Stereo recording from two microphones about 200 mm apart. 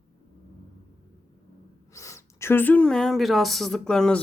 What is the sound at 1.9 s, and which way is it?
Speech, 15° left (ahead or behind).